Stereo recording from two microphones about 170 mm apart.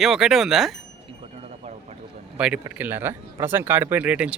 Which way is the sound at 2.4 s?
10° right (ahead or behind).